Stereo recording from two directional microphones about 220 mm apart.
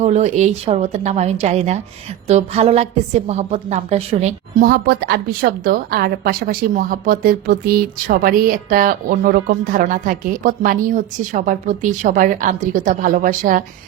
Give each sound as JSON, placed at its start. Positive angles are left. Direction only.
{"t": 0.0, "sound": "a woman's voice", "side_deg": -30}
{"t": 4.7, "sound": "a woman's voice", "side_deg": -45}